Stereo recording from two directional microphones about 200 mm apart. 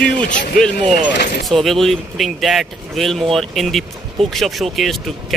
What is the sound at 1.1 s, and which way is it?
Speech, 50° left (ahead or behind).